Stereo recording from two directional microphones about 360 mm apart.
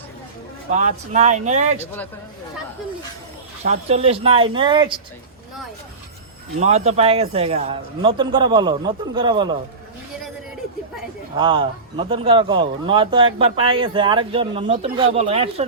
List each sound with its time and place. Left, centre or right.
0.7 s a man's voice: centre
3.6 s a man's voice: centre
6.6 s a man's voice: centre
11.3 s a man's voice: centre